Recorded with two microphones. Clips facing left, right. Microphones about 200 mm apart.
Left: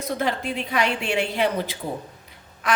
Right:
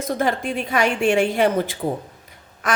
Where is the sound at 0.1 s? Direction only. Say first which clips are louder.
Right 3 dB; 45° right (ahead or behind).